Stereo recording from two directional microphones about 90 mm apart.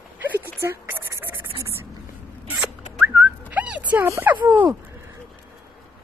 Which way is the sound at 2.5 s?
15° right (ahead or behind).